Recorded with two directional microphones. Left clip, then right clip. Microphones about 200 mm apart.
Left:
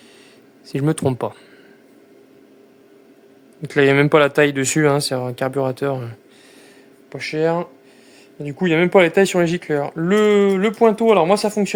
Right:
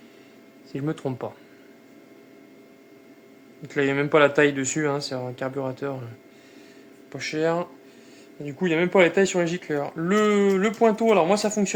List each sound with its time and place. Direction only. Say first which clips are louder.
0.7 s speech: left 9 dB; 60° left (ahead or behind)
3.6 s speech: left 9 dB; 60° left (ahead or behind)
7.1 s speech: left 5 dB; 40° left (ahead or behind)
8.4 s speech: left 6 dB; 55° left (ahead or behind)